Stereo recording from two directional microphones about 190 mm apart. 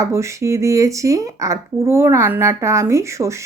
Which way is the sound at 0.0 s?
15° right (ahead or behind).